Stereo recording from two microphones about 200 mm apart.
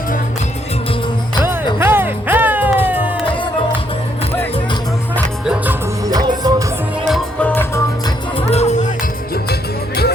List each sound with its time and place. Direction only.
1.5 s music: 10° right (ahead or behind)
6.1 s music: 20° right (ahead or behind)
7.1 s music: 5° left (ahead or behind)
8.0 s music: 30° left (ahead or behind)
9.3 s music: 50° left (ahead or behind)